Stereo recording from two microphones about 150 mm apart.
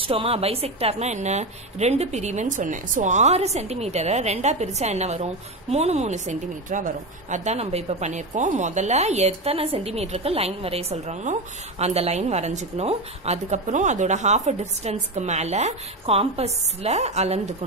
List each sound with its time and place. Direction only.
0.0 s speech: 40° right (ahead or behind)